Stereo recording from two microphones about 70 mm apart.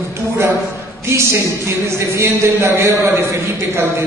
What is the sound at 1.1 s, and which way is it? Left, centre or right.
A man's voice, right.